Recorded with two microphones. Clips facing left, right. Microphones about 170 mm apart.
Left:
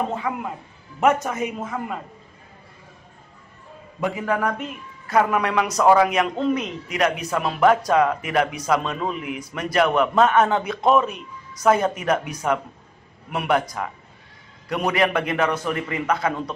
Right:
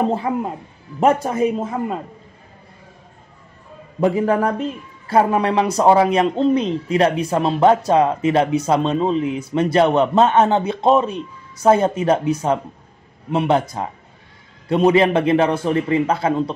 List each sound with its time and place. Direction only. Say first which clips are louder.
0.1 s speech: right 6 dB; 35° right (ahead or behind)
4.0 s a man's voice: right 7 dB; 30° right (ahead or behind)